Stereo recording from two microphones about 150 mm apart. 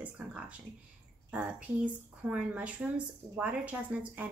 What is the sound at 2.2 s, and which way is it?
A woman's voice, 10° right (ahead or behind).